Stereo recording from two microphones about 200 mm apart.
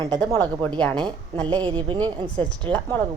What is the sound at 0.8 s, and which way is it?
Speech, 5° left (ahead or behind).